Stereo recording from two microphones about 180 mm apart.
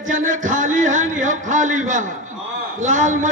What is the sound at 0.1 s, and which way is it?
A man's voice, 45° right (ahead or behind).